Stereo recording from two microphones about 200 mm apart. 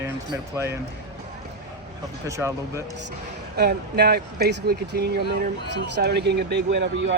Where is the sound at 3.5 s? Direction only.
55° right (ahead or behind).